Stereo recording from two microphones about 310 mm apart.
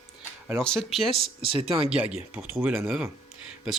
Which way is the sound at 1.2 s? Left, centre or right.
Centre.